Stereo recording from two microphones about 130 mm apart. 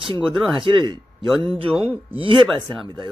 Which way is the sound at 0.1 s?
40° right (ahead or behind).